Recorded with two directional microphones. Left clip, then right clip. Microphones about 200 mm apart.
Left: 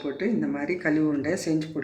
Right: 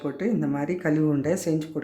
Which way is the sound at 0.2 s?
55° right (ahead or behind).